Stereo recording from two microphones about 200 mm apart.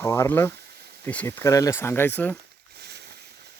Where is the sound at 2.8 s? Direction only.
55° right (ahead or behind).